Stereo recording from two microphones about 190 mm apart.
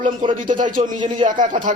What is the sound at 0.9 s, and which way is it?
Speech, 25° right (ahead or behind).